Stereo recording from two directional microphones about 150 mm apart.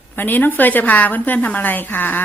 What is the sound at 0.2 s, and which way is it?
A woman's voice, 10° left (ahead or behind).